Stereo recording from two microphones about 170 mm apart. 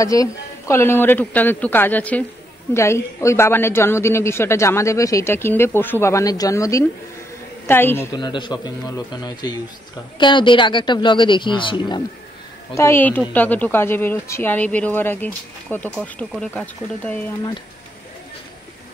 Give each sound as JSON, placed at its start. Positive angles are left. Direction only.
{"t": 0.0, "sound": "speech", "side_deg": 20}
{"t": 8.2, "sound": "speech", "side_deg": 25}
{"t": 12.7, "sound": "speech", "side_deg": 15}